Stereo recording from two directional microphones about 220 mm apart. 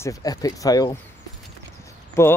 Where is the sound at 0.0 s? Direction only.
15° left (ahead or behind).